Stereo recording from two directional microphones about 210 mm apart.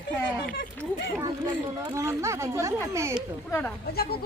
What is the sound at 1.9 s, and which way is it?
Speech, 15° right (ahead or behind).